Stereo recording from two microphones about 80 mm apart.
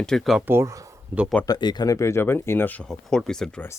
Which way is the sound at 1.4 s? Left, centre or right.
Left.